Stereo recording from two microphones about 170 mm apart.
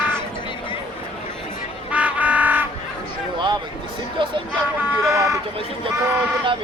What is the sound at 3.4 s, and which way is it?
Speech, 25° right (ahead or behind).